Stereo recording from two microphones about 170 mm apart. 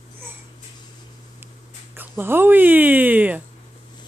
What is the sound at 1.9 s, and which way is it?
Speech, 10° right (ahead or behind).